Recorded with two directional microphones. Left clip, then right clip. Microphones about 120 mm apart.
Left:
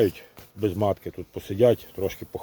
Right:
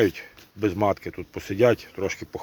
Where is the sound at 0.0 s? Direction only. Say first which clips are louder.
Right 1 dB; 40° left (ahead or behind).